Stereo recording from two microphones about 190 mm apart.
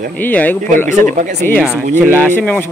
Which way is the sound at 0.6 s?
40° right (ahead or behind).